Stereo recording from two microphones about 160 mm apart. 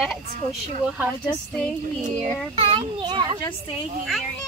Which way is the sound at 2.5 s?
35° right (ahead or behind).